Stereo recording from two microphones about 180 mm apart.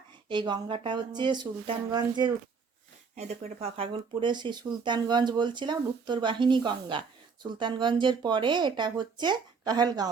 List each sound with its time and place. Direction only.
0.3 s speech: 25° right (ahead or behind)
3.2 s speech: 35° right (ahead or behind)